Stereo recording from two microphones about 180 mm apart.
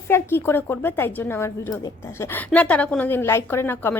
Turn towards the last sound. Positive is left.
turn(degrees=10)  # may be behind; listen again after turning